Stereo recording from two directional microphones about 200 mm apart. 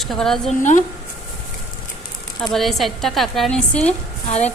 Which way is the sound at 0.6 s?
40° left (ahead or behind).